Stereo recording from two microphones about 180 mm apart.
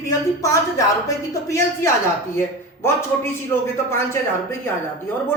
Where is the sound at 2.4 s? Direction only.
15° left (ahead or behind).